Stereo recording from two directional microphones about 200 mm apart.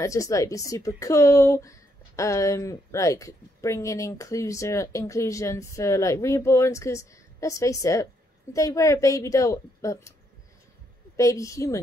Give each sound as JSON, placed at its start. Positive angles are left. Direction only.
{"t": 0.0, "sound": "speech", "side_deg": 15}
{"t": 11.1, "sound": "speech", "side_deg": 15}